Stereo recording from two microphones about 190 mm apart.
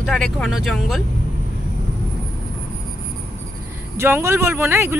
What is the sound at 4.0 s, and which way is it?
Speech, 15° right (ahead or behind).